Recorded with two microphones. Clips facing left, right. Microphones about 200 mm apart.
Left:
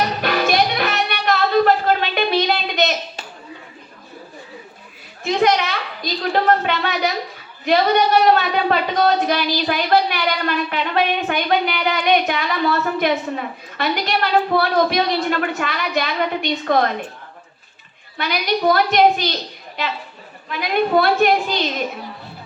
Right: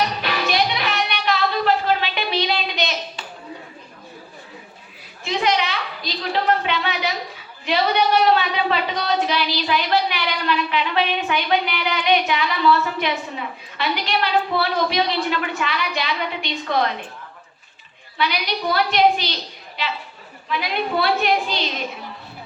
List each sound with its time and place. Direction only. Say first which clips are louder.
0.2 s music: left 4 dB; 50° left (ahead or behind)
5.2 s a sound: left 4 dB; 50° left (ahead or behind)
18.2 s a woman's voice: left 4 dB; 50° left (ahead or behind)
20.5 s a woman's voice: left 5 dB; 50° left (ahead or behind)